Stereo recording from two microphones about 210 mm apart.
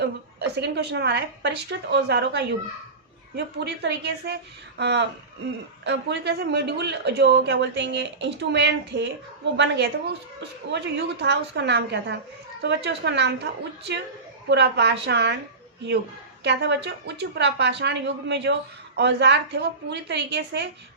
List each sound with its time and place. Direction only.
0.0 s a woman's voice: 55° right (ahead or behind)
16.4 s a woman's voice: 55° right (ahead or behind)